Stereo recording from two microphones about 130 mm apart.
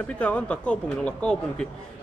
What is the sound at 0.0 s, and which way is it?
Speech, 10° left (ahead or behind).